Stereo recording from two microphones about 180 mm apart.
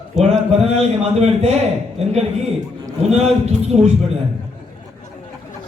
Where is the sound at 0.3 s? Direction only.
35° right (ahead or behind).